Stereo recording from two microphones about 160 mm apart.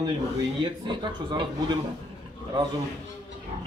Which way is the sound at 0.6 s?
30° right (ahead or behind).